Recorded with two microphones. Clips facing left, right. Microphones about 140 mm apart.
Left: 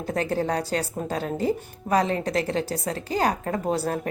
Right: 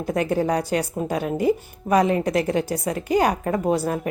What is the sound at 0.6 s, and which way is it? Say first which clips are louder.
A woman's voice: right 4 dB; 15° right (ahead or behind).